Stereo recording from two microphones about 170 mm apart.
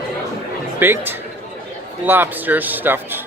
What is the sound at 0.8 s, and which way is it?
Speech, 10° right (ahead or behind).